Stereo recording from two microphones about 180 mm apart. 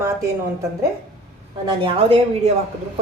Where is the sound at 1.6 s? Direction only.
25° right (ahead or behind).